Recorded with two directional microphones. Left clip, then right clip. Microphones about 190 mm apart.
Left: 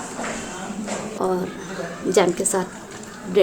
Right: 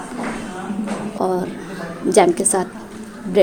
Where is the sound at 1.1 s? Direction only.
25° right (ahead or behind).